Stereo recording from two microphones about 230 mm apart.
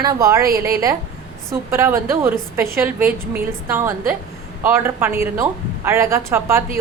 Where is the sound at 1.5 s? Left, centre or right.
Centre.